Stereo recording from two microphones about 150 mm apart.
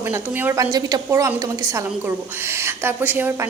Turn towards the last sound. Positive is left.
turn(degrees=-15)  # may be behind; listen again after turning